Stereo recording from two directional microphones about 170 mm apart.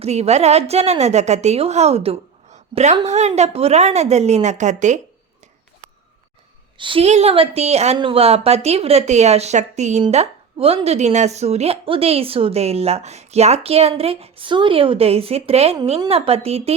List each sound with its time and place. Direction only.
0.0 s speech: 40° right (ahead or behind)
6.7 s speech: 30° right (ahead or behind)